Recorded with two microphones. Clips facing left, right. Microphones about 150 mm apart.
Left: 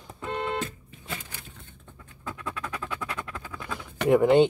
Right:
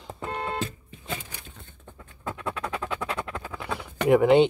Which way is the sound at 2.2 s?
40° right (ahead or behind).